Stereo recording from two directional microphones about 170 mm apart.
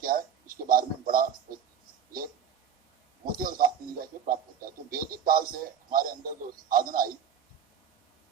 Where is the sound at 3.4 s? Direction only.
55° right (ahead or behind).